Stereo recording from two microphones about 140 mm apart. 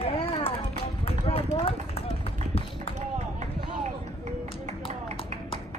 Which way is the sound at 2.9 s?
55° right (ahead or behind).